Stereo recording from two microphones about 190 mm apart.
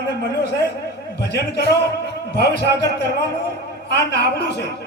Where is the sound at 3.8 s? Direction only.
60° left (ahead or behind).